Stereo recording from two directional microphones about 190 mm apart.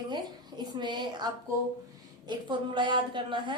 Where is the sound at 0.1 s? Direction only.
25° right (ahead or behind).